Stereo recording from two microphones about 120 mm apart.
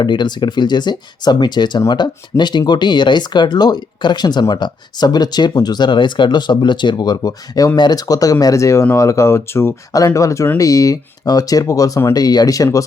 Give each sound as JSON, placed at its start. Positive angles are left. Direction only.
{"t": 0.0, "sound": "speech", "side_deg": 40}